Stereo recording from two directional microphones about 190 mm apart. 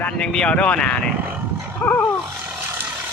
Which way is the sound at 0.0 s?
5° left (ahead or behind).